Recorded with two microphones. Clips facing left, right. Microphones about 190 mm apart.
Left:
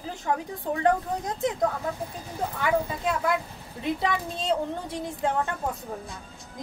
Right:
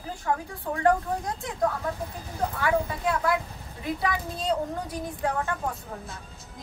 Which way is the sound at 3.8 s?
25° left (ahead or behind).